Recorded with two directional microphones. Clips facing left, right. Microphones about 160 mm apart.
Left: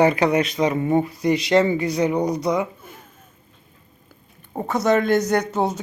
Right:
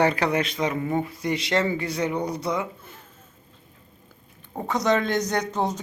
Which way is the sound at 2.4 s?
15° left (ahead or behind).